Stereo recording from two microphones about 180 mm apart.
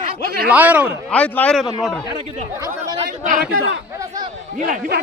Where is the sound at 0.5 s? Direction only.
10° right (ahead or behind).